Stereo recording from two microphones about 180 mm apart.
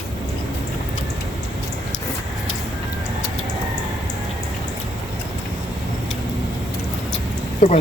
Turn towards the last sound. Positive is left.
turn(degrees=45)  # may be behind; listen again after turning